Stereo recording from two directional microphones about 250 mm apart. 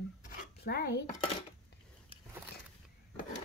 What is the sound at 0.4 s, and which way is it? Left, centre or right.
Dishes, left.